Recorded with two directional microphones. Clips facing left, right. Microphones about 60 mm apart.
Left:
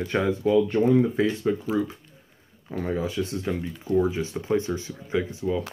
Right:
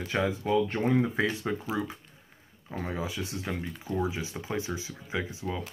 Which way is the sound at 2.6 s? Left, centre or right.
Centre.